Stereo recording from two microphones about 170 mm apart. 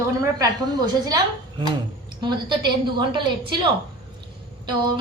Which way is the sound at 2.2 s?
25° right (ahead or behind).